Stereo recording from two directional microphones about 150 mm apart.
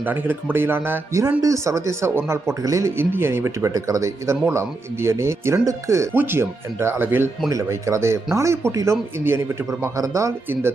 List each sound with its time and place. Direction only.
0.0 s speech: 10° right (ahead or behind)